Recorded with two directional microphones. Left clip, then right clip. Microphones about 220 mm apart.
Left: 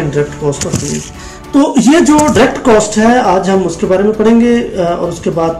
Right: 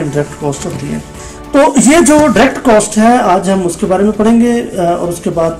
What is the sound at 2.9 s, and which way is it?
Speech, 45° right (ahead or behind).